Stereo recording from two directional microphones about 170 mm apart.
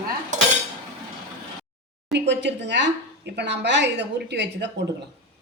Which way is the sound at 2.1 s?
90° right.